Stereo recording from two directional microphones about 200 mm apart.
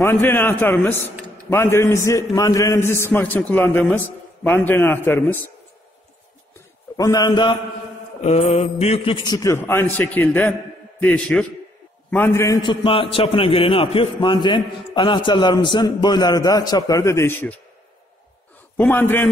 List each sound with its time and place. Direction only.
0.0 s a man's voice: 10° left (ahead or behind)
7.0 s a man's voice: 20° left (ahead or behind)
8.2 s a man's voice: 30° left (ahead or behind); by 12.5 s 10° left (ahead or behind)
12.6 s a man's voice: 25° left (ahead or behind); by 17.6 s 10° left (ahead or behind)
18.8 s a man's voice: 10° left (ahead or behind)